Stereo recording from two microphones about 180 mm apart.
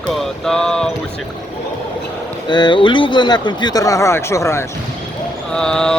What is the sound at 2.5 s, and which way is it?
Speech, 25° left (ahead or behind).